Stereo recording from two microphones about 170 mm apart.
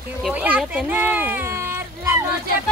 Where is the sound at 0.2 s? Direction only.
10° right (ahead or behind).